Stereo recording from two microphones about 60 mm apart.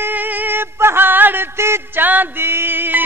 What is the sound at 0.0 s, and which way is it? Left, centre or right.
Music, right.